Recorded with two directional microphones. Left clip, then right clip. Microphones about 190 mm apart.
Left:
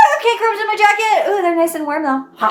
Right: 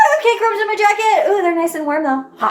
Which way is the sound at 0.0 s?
15° left (ahead or behind).